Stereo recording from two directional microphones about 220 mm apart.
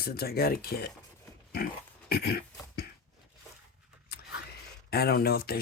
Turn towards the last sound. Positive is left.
turn(degrees=45)  # may be behind; listen again after turning